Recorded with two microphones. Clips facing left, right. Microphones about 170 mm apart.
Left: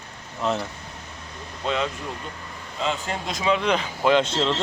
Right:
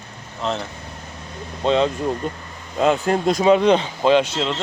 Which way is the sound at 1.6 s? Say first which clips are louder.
Right 8 dB; 30° right (ahead or behind).